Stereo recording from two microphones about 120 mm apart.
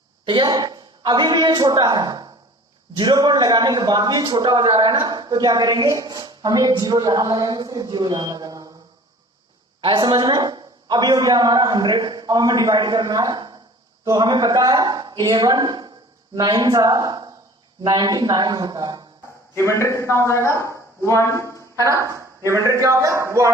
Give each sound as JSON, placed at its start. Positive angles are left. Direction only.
{"t": 0.3, "sound": "a woman's voice", "side_deg": -40}
{"t": 9.8, "sound": "a man's voice", "side_deg": -40}
{"t": 19.5, "sound": "a man's voice", "side_deg": 25}
{"t": 21.8, "sound": "speech", "side_deg": -25}